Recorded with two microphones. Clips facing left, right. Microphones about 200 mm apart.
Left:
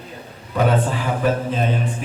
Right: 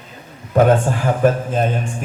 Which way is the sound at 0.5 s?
50° right (ahead or behind).